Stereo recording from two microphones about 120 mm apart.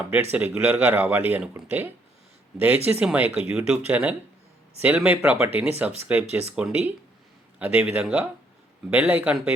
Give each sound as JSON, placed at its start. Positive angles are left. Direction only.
{"t": 0.3, "sound": "speech", "side_deg": -15}